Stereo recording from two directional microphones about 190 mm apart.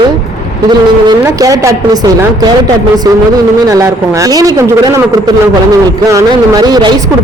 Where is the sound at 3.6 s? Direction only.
15° right (ahead or behind).